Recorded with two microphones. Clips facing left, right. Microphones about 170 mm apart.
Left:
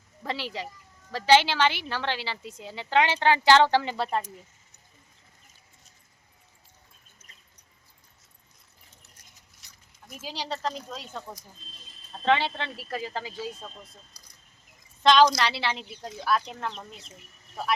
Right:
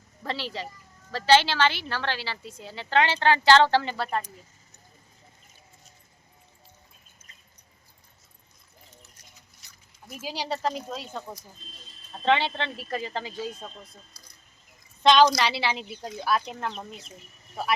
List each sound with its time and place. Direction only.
0.2 s a woman's voice: 15° left (ahead or behind)
9.6 s a sound: centre (ahead or behind)
10.1 s speech: 10° right (ahead or behind)
12.2 s speech: centre (ahead or behind)
15.0 s speech: centre (ahead or behind)